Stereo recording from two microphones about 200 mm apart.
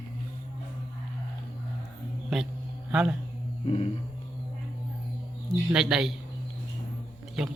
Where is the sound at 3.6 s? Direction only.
30° left (ahead or behind).